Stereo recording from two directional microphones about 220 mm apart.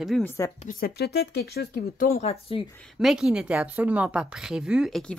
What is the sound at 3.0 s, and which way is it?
A woman's voice, 5° right (ahead or behind).